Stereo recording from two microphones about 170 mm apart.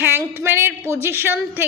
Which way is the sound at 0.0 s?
15° right (ahead or behind).